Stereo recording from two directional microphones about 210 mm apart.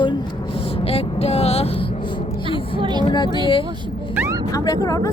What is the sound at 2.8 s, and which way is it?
Vehicle, 20° right (ahead or behind).